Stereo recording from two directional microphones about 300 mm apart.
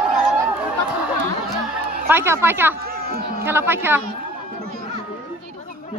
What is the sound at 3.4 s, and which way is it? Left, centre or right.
Speech, centre.